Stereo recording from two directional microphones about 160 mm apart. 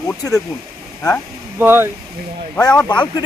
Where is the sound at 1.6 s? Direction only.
15° right (ahead or behind).